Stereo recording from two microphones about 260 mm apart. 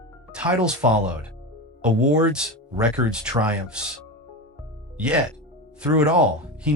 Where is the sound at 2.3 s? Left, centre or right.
Centre.